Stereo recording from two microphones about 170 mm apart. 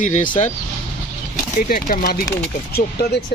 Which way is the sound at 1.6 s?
55° left (ahead or behind).